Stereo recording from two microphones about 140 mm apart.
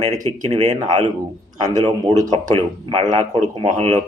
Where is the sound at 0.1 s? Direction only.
60° right (ahead or behind).